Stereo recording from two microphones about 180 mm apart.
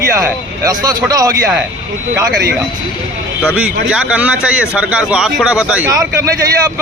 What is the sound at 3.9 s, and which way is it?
A man's voice, 5° right (ahead or behind).